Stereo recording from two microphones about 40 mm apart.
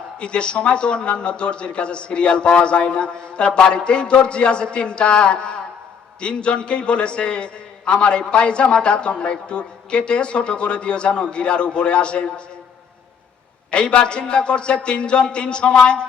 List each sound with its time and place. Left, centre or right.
0.2 s a man's voice: left
13.7 s a man's voice: left